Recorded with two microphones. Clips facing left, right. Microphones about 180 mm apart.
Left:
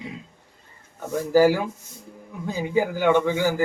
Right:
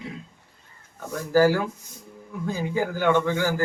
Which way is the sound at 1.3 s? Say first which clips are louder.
Left 1 dB; 15° left (ahead or behind).